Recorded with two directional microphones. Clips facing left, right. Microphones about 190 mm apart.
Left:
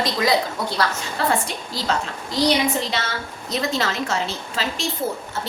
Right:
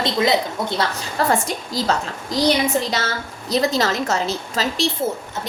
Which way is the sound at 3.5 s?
35° right (ahead or behind).